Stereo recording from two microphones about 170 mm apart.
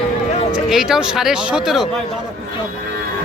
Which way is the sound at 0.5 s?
5° right (ahead or behind).